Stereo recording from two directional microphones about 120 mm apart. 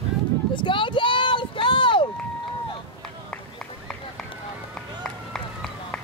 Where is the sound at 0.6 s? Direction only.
45° left (ahead or behind).